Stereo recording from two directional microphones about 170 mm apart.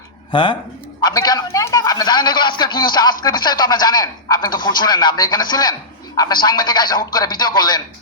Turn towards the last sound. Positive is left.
turn(degrees=25)  # may be behind; listen again after turning